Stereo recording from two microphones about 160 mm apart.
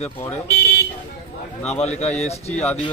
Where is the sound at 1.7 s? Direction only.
45° left (ahead or behind).